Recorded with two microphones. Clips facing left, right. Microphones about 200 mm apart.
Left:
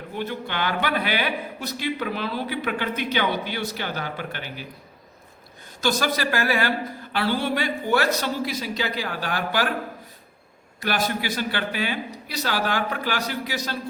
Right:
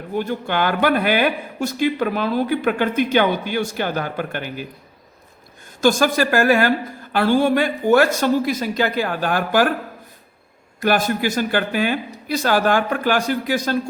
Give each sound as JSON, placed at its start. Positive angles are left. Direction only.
{"t": 0.2, "sound": "a man's voice", "side_deg": -50}
{"t": 5.8, "sound": "a man's voice", "side_deg": -50}
{"t": 10.8, "sound": "a man's voice", "side_deg": -50}